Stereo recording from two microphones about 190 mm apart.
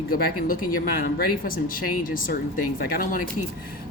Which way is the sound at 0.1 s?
50° left (ahead or behind).